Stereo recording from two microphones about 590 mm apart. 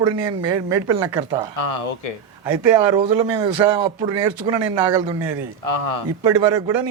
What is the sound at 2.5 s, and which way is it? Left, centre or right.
Speech, right.